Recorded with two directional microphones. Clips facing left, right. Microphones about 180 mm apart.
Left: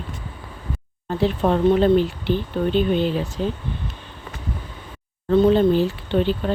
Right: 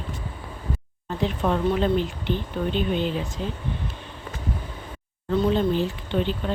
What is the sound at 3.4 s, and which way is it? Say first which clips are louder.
Speech: left 6 dB; 45° left (ahead or behind).